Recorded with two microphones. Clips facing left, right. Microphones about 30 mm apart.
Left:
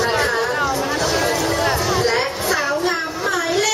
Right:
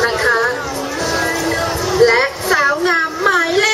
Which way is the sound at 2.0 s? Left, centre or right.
Right.